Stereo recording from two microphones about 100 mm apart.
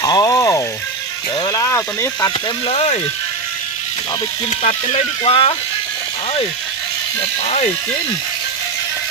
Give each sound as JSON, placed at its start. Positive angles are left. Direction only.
{"t": 0.0, "sound": "frying", "side_deg": 40}
{"t": 1.5, "sound": "a sound", "side_deg": 35}
{"t": 2.6, "sound": "speech", "side_deg": 85}
{"t": 4.6, "sound": "speech", "side_deg": 90}
{"t": 7.2, "sound": "speech", "side_deg": 85}